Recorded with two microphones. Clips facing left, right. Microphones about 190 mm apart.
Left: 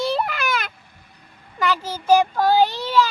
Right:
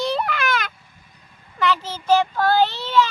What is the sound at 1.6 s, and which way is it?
Speech, 10° left (ahead or behind).